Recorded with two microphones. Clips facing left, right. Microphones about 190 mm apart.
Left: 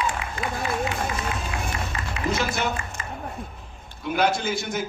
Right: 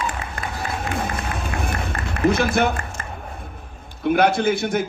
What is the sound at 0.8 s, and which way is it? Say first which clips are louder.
Run: right 2 dB; 60° right (ahead or behind).